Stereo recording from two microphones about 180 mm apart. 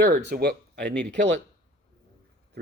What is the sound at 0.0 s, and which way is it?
Speech, 65° right (ahead or behind).